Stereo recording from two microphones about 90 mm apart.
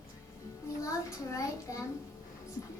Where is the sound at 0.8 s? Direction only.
35° left (ahead or behind).